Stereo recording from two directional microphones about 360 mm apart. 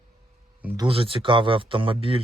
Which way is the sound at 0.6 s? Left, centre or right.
Centre.